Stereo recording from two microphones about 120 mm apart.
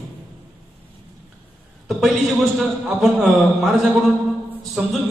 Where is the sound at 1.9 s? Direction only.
Centre (ahead or behind).